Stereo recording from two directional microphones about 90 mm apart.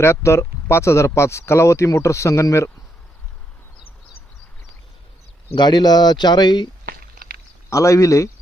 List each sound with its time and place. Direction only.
0.0 s speech: 30° left (ahead or behind)
5.5 s speech: 55° left (ahead or behind)
7.7 s speech: 35° left (ahead or behind)